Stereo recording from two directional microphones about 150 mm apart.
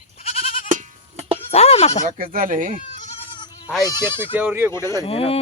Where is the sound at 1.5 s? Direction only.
45° left (ahead or behind).